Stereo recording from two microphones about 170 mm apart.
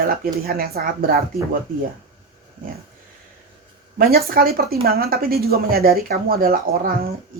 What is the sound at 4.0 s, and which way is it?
A woman's voice, 60° right (ahead or behind).